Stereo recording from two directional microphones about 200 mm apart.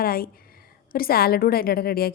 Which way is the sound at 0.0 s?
50° left (ahead or behind).